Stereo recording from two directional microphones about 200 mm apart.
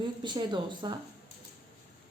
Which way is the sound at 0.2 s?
20° right (ahead or behind).